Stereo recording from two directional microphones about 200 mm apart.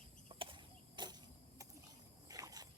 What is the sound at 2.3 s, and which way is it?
Boat, 20° right (ahead or behind).